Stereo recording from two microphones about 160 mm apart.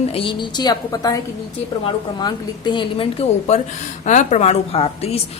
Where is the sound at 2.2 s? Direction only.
30° left (ahead or behind).